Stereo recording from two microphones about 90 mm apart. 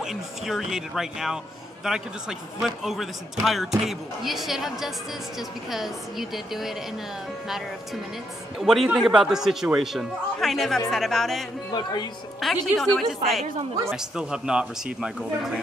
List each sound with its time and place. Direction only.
0.0 s speech: 5° right (ahead or behind)
11.7 s speech: 55° left (ahead or behind)
12.4 s speech: 5° left (ahead or behind)
13.8 s speech: 5° right (ahead or behind)